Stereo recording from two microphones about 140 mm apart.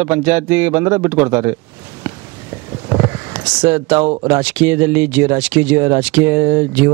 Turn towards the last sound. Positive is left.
turn(degrees=-15)  # may be behind; listen again after turning